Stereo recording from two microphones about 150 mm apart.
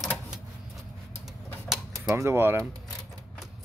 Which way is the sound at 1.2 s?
Centre (ahead or behind).